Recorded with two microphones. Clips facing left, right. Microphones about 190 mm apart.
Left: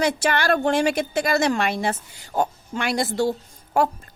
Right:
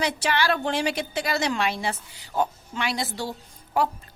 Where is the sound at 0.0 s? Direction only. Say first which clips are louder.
Left 3 dB; 50° left (ahead or behind).